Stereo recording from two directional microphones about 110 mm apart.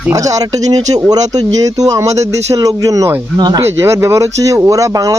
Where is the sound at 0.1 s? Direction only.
30° right (ahead or behind).